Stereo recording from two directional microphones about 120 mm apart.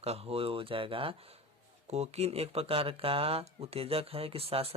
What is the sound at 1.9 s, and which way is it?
Speech, 65° right (ahead or behind).